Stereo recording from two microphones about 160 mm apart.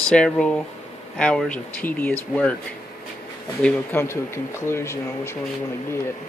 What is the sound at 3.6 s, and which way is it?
Speech, 10° left (ahead or behind).